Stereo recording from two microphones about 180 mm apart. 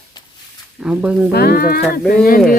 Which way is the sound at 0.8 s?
5° right (ahead or behind).